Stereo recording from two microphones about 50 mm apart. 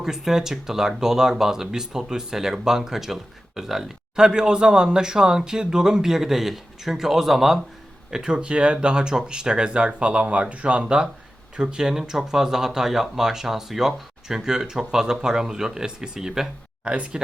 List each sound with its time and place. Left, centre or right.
0.0 s speech: centre
8.1 s speech: centre
16.8 s speech: right